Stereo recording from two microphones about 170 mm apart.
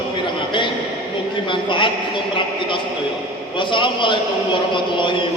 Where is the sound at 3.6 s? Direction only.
30° left (ahead or behind).